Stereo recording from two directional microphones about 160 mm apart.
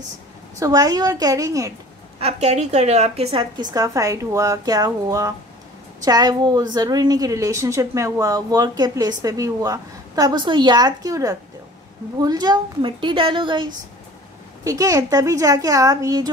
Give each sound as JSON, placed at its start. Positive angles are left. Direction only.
{"t": 0.6, "sound": "a woman's voice", "side_deg": -20}
{"t": 2.1, "sound": "a woman's voice", "side_deg": -40}
{"t": 3.7, "sound": "a woman's voice", "side_deg": -20}